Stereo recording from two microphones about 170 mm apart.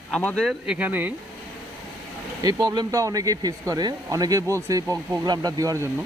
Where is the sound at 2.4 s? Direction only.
20° right (ahead or behind).